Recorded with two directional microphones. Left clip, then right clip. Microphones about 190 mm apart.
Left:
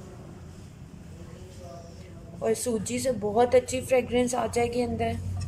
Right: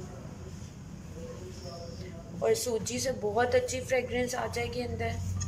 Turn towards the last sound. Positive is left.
turn(degrees=15)  # may be behind; listen again after turning